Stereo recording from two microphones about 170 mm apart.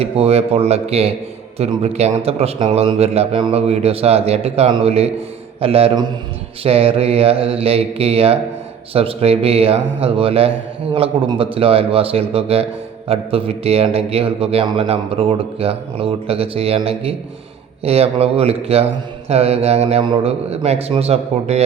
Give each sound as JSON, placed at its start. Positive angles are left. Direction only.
{"t": 0.0, "sound": "a man's voice", "side_deg": -35}